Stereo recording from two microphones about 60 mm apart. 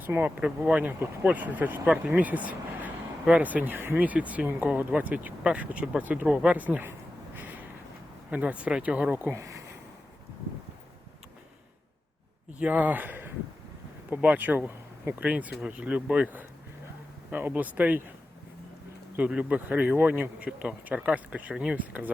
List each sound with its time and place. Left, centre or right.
0.0 s speech: right
0.3 s speech: right
7.3 s a sound: right
8.3 s speech: right
9.3 s speech: right
12.5 s speech: right
17.3 s speech: right
19.3 s speech: right